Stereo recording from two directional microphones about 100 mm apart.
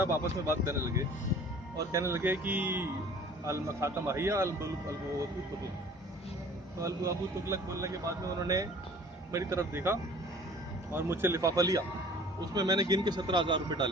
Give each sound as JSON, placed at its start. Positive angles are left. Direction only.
{"t": 0.0, "sound": "speech", "side_deg": -25}
{"t": 3.4, "sound": "speech", "side_deg": -30}
{"t": 6.7, "sound": "speech", "side_deg": -30}